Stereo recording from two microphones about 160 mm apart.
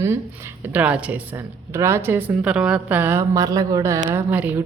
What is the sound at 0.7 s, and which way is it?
A woman's voice, 10° right (ahead or behind).